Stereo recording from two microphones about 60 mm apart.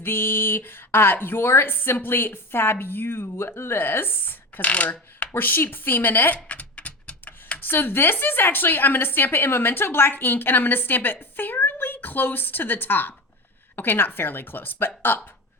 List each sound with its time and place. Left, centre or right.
0.0 s a woman's voice: left
4.6 s speech: left
5.3 s a woman's voice: left
6.3 s a sound: left
7.6 s a woman's voice: left